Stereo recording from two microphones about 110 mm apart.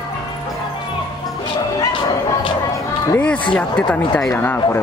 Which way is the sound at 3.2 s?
10° left (ahead or behind).